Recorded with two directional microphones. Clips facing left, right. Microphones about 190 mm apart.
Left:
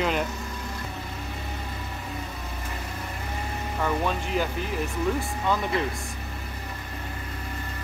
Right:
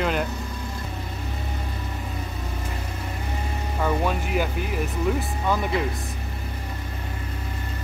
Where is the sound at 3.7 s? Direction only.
10° right (ahead or behind).